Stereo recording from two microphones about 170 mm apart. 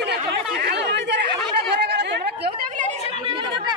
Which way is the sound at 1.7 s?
85° right.